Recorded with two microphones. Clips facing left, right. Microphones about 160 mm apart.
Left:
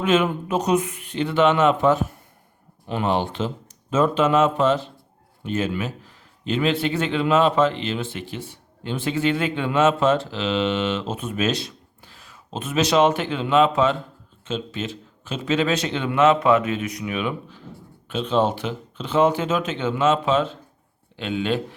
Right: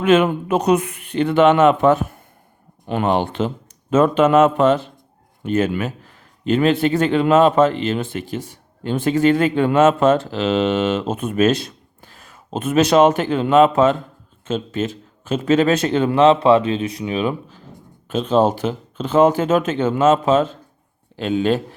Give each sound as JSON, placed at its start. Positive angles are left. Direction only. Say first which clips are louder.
{"t": 0.0, "sound": "a man's voice", "louder": "right 5 dB", "side_deg": -60}